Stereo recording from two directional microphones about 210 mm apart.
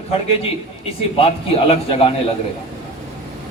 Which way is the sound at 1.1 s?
25° left (ahead or behind).